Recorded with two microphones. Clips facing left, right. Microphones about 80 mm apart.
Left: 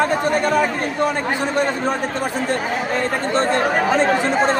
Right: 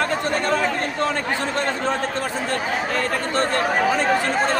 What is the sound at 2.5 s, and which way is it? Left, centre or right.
Speech, left.